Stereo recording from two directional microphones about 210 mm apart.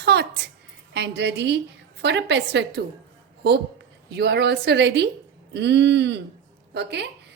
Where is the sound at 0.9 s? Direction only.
55° right (ahead or behind).